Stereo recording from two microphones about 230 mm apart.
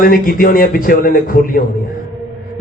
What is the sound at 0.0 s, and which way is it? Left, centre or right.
A man's voice, left.